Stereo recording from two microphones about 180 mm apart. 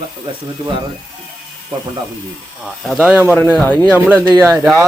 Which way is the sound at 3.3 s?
10° left (ahead or behind).